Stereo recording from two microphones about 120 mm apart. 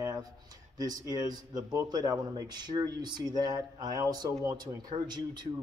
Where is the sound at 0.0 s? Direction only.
30° right (ahead or behind).